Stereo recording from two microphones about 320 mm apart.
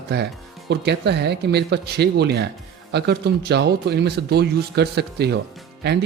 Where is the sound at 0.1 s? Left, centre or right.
Right.